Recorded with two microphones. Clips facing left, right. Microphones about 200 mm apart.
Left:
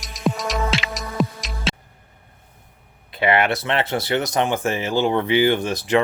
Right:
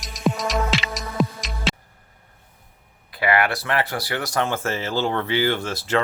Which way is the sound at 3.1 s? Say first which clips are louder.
Left 2 dB; 25° left (ahead or behind).